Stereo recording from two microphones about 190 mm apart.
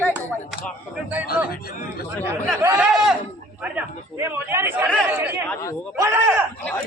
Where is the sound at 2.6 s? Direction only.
10° right (ahead or behind).